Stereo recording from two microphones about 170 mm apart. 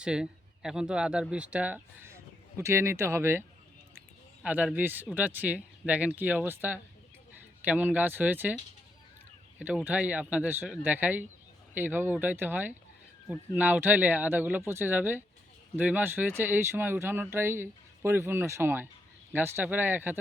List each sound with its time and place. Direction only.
0.0 s speech: 5° right (ahead or behind)
4.4 s speech: 10° right (ahead or behind)
9.6 s speech: 10° right (ahead or behind)